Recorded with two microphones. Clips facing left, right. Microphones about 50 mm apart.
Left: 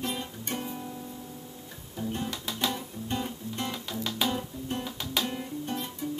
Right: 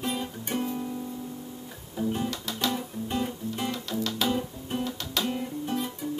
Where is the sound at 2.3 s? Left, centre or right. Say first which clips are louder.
Right 1 dB; centre.